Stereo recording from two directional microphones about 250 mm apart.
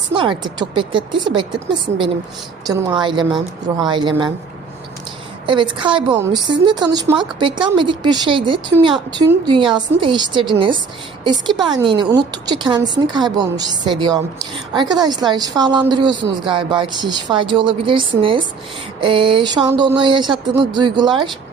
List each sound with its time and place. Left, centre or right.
0.1 s a woman's voice: centre
2.6 s a woman's voice: centre
5.5 s a woman's voice: centre